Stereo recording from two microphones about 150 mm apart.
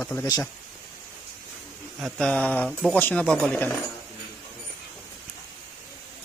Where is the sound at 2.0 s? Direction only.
5° left (ahead or behind).